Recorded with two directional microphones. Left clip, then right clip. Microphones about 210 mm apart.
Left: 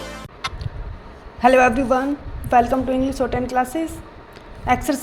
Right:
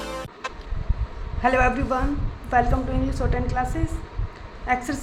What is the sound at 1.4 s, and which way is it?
A woman's voice, 20° left (ahead or behind).